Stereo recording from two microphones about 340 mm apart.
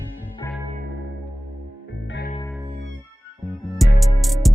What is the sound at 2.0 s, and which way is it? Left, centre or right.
Music, left.